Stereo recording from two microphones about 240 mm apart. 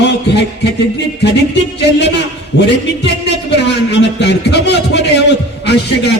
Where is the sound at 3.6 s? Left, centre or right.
Left.